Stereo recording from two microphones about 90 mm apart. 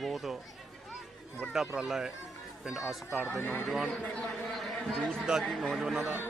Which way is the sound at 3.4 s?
20° left (ahead or behind).